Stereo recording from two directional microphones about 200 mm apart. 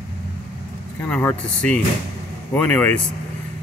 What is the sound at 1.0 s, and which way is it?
Speech, 10° left (ahead or behind).